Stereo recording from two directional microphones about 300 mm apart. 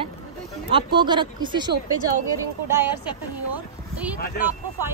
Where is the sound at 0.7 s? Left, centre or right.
Centre.